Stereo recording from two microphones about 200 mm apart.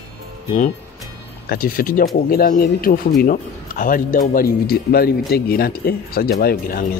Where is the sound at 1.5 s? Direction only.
45° left (ahead or behind).